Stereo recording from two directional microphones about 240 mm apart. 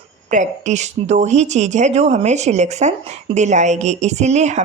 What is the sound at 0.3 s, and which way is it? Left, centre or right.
A woman's voice, right.